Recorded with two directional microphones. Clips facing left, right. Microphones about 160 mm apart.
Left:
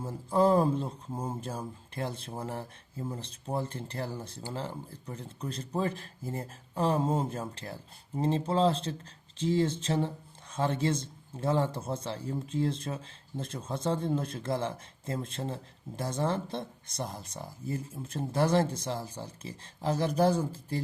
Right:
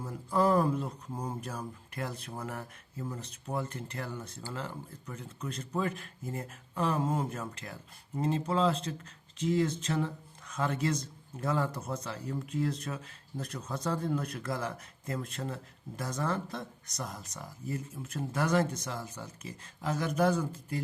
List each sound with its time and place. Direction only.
0.0 s speech: 30° left (ahead or behind)